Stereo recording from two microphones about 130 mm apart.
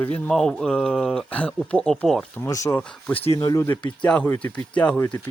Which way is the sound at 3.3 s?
25° left (ahead or behind).